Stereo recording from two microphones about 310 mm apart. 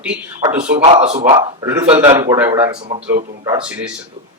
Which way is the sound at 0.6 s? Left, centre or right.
Centre.